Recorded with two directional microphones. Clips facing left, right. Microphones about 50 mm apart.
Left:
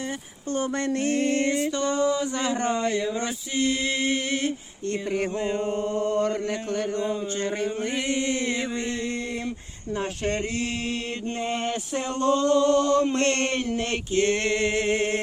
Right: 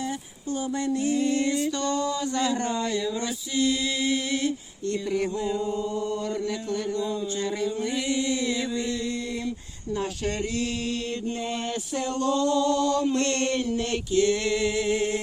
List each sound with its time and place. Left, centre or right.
0.5 s mantra: left